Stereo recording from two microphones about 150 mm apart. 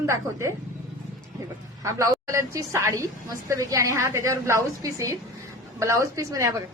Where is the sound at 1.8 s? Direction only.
20° right (ahead or behind).